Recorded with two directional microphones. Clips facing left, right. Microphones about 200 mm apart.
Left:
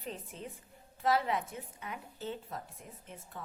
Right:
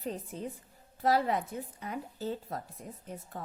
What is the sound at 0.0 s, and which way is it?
A woman's voice, 40° right (ahead or behind).